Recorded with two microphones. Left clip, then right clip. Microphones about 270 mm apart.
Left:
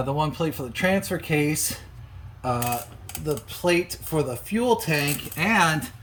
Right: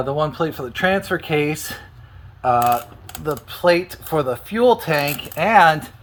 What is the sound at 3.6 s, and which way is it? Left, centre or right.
Speech, centre.